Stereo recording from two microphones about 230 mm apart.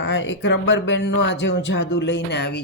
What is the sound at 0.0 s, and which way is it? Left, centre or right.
Speech, left.